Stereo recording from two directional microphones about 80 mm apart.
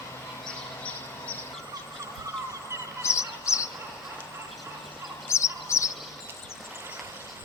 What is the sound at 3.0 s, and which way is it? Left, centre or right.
Fowl, left.